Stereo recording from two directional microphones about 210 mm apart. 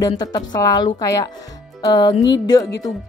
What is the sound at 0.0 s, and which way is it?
Speech, 20° left (ahead or behind).